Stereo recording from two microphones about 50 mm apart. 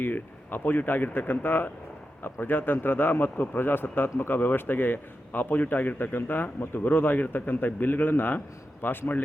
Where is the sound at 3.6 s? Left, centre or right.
Left.